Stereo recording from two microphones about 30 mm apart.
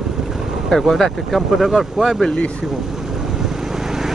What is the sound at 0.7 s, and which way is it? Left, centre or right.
Speech, centre.